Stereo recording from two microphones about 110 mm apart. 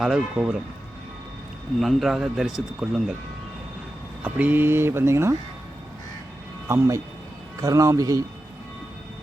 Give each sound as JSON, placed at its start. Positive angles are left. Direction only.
{"t": 0.0, "sound": "speech", "side_deg": -5}
{"t": 1.8, "sound": "a man's voice", "side_deg": 0}
{"t": 4.2, "sound": "speech", "side_deg": -15}
{"t": 6.7, "sound": "speech", "side_deg": -25}